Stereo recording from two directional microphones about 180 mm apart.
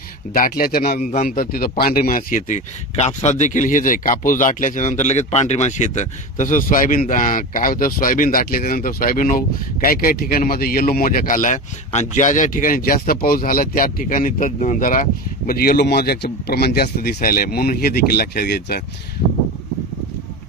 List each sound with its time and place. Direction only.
0.3 s a man's voice: 50° left (ahead or behind)